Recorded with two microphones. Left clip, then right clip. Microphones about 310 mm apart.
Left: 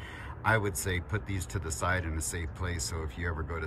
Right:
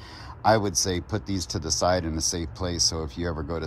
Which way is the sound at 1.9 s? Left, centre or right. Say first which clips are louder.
Right 7 dB; centre.